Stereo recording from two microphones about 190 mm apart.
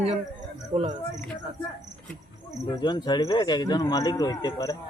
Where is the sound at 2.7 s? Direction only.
25° left (ahead or behind).